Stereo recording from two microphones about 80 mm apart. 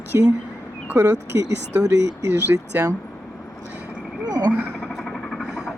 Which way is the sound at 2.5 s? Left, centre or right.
Right.